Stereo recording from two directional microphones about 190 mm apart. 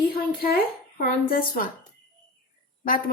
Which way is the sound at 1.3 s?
50° left (ahead or behind).